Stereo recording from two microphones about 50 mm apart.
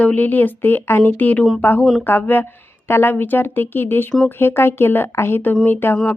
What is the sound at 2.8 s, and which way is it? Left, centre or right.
Speech, left.